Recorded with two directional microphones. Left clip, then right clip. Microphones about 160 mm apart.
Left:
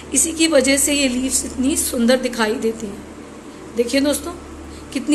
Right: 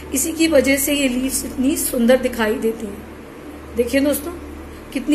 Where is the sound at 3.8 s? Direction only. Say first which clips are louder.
Even; 5° right (ahead or behind).